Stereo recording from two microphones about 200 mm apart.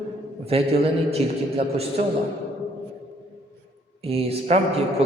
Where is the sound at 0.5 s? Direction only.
30° right (ahead or behind).